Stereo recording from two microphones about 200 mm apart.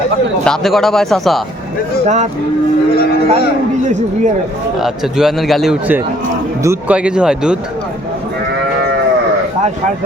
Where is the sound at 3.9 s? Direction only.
35° right (ahead or behind).